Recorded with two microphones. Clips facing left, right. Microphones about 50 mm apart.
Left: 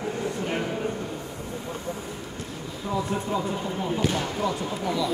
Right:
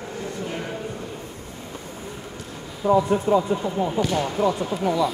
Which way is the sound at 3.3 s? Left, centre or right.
Right.